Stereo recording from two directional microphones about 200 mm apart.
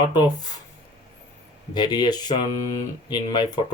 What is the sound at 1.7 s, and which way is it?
Speech, 20° left (ahead or behind).